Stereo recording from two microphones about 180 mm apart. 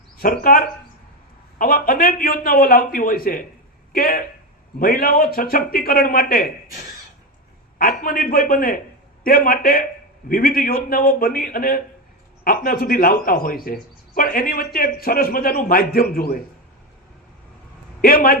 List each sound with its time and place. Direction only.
0.2 s speech: 50° left (ahead or behind)
7.8 s speech: 55° left (ahead or behind)
18.0 s speech: 55° left (ahead or behind)